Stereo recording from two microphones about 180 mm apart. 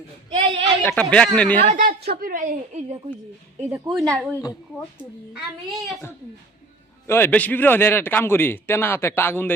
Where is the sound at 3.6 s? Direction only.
15° right (ahead or behind).